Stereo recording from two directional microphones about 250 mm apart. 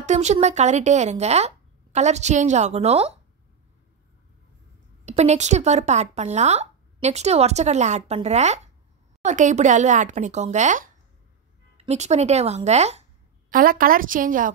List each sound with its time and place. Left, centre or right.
0.0 s speech: right
5.0 s a woman's voice: right